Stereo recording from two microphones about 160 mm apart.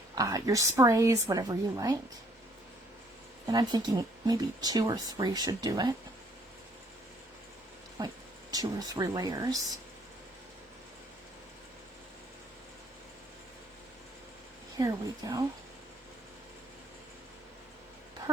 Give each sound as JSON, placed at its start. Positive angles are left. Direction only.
{"t": 0.2, "sound": "speech", "side_deg": -20}
{"t": 3.4, "sound": "speech", "side_deg": -25}
{"t": 8.0, "sound": "speech", "side_deg": -20}
{"t": 14.8, "sound": "speech", "side_deg": -20}